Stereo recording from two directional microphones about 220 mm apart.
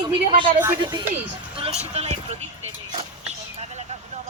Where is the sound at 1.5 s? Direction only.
30° right (ahead or behind).